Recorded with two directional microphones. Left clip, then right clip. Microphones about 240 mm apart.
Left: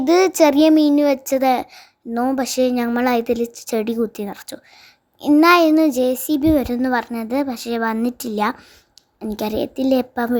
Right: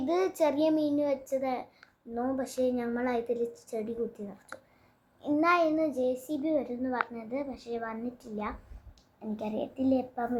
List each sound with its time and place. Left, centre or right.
0.0 s a child's voice: left